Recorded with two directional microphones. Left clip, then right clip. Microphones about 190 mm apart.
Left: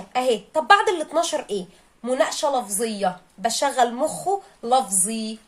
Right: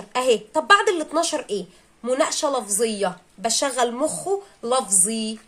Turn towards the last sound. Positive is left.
turn(degrees=-20)  # may be behind; listen again after turning